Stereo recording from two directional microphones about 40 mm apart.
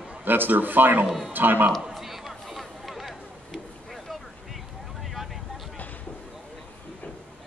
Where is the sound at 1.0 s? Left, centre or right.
Centre.